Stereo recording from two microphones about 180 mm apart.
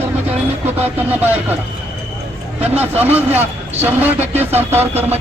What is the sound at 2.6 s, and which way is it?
A man's voice, 10° right (ahead or behind).